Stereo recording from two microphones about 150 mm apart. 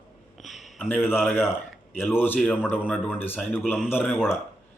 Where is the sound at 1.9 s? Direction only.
15° left (ahead or behind).